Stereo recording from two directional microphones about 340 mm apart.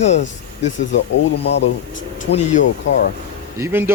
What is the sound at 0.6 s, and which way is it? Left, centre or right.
Speech, left.